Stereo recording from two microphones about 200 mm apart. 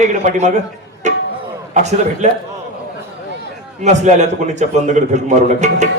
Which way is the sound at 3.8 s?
35° right (ahead or behind).